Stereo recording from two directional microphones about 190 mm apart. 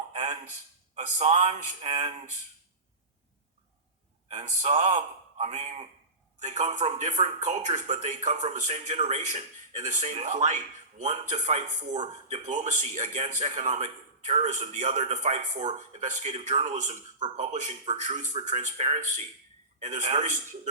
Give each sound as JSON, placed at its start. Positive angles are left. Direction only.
{"t": 0.1, "sound": "a sound", "side_deg": -40}
{"t": 0.9, "sound": "speech", "side_deg": -35}
{"t": 4.3, "sound": "speech", "side_deg": -40}